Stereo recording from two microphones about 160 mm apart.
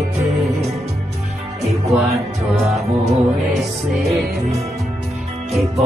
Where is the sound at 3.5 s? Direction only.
Centre (ahead or behind).